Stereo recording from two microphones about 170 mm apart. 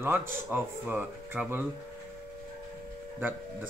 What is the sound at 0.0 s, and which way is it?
Speech, 15° right (ahead or behind).